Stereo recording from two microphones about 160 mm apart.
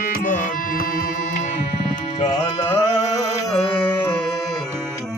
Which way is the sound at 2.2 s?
35° left (ahead or behind).